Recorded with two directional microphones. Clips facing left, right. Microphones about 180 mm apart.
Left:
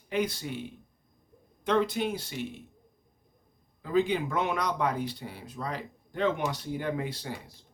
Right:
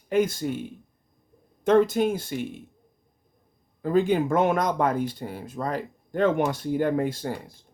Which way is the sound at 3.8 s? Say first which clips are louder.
Right 5 dB; 50° right (ahead or behind).